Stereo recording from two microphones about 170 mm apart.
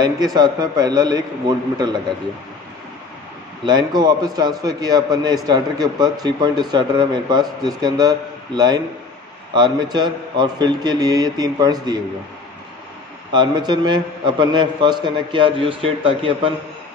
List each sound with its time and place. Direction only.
0.0 s a man's voice: 25° right (ahead or behind)
3.6 s a man's voice: 25° right (ahead or behind)
13.3 s a man's voice: 25° right (ahead or behind)